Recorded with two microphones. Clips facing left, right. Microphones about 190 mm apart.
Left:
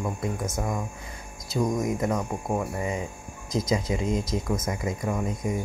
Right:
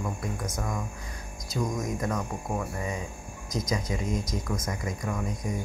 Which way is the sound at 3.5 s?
25° left (ahead or behind).